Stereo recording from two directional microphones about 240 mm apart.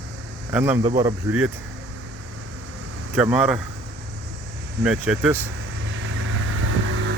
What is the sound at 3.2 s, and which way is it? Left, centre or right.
Speech, centre.